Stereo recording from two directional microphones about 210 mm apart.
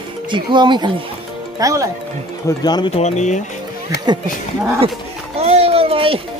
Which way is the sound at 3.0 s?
35° left (ahead or behind).